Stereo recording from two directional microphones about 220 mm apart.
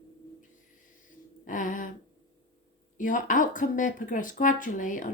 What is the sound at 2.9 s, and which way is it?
Speech, 35° left (ahead or behind).